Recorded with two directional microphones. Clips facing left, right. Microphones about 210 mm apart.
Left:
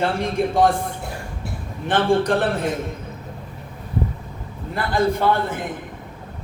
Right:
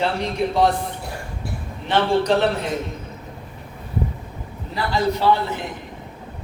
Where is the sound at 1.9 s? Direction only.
50° left (ahead or behind).